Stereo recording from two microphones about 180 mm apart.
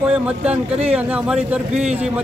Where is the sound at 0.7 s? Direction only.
35° right (ahead or behind).